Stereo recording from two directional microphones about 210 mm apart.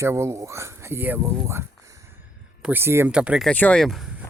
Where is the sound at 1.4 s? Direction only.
15° right (ahead or behind).